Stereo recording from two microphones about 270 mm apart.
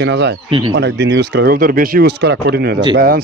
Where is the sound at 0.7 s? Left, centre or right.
Right.